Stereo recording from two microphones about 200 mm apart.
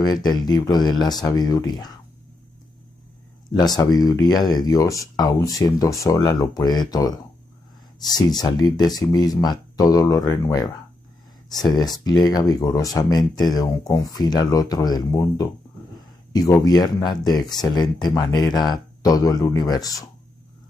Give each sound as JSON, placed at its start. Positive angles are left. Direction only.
{"t": 0.0, "sound": "speech", "side_deg": 20}
{"t": 3.5, "sound": "speech", "side_deg": 20}